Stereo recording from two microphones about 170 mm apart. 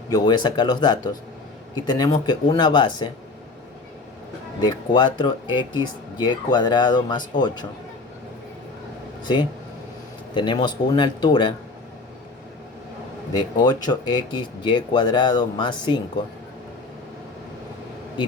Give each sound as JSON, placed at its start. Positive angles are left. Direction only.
{"t": 0.1, "sound": "speech", "side_deg": 25}
{"t": 4.6, "sound": "speech", "side_deg": 25}
{"t": 9.2, "sound": "speech", "side_deg": 25}
{"t": 13.3, "sound": "speech", "side_deg": 25}